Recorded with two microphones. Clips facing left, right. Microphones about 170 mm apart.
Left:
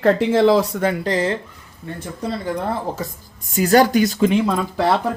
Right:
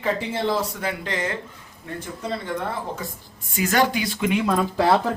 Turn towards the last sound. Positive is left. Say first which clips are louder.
# left 1 dB
turn(degrees=-10)  # may be behind; listen again after turning